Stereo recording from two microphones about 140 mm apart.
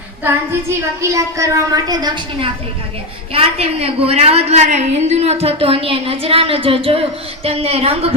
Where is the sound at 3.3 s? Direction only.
45° right (ahead or behind).